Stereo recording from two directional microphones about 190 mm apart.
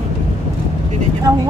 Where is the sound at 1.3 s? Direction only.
20° right (ahead or behind).